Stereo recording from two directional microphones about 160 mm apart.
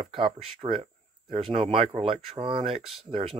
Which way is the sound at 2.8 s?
Centre (ahead or behind).